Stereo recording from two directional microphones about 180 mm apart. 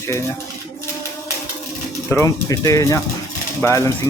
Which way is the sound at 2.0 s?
15° left (ahead or behind).